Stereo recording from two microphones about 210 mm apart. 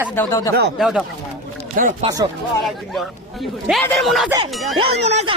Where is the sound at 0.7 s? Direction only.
Centre (ahead or behind).